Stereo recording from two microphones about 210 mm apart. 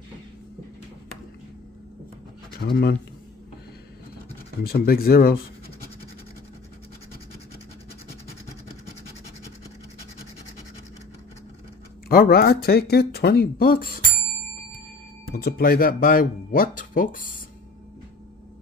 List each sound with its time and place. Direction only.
2.6 s speech: 50° left (ahead or behind)
4.6 s speech: 45° left (ahead or behind)
12.1 s speech: 45° left (ahead or behind)
15.3 s speech: 45° left (ahead or behind)